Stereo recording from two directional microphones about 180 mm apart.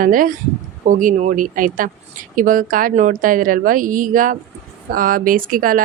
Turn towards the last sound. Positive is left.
turn(degrees=-50)  # may be behind; listen again after turning